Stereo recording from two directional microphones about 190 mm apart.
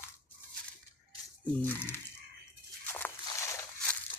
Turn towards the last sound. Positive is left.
turn(degrees=15)  # may be behind; listen again after turning